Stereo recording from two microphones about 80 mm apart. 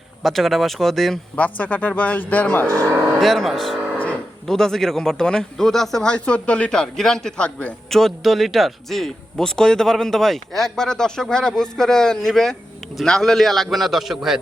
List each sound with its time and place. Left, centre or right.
0.2 s a man's voice: centre
1.4 s speech: centre
2.6 s speech: right
3.2 s a man's voice: centre
3.9 s a man's voice: centre